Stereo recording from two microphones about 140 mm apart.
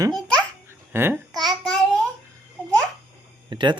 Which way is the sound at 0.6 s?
15° right (ahead or behind).